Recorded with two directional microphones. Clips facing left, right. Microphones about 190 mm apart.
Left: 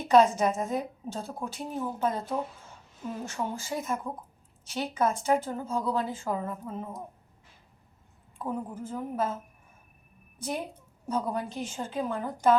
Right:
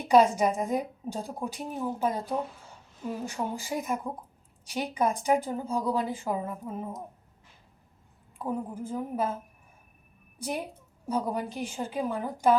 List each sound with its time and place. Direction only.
0.0 s a woman's voice: 10° right (ahead or behind)
8.4 s a woman's voice: 15° right (ahead or behind)
11.1 s a woman's voice: 10° right (ahead or behind)